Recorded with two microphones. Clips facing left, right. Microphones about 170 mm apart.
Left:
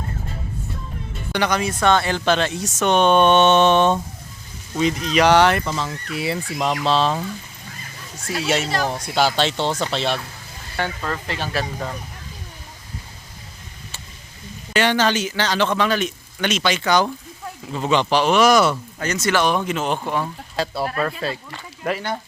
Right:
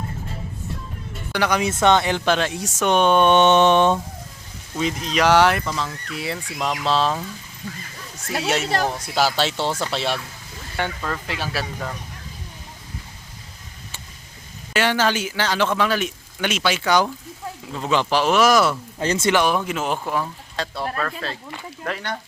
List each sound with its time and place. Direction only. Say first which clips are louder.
1.3 s speech: even; 10° right (ahead or behind)
1.6 s speech: right 3 dB; 20° right (ahead or behind)
4.8 s speech: left 3 dB; centre (ahead or behind)
8.4 s speech: even; centre (ahead or behind)
11.3 s speech: left 2 dB; 10° right (ahead or behind)
14.7 s speech: left 2 dB; 5° right (ahead or behind)
17.7 s speech: left 2 dB; 5° left (ahead or behind)
18.9 s speech: right 2 dB; 25° right (ahead or behind)
19.3 s speech: left 2 dB; 10° right (ahead or behind)